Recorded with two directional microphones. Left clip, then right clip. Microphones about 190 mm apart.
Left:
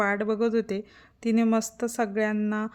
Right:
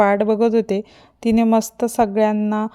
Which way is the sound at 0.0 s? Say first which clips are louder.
Right 10 dB; 30° right (ahead or behind).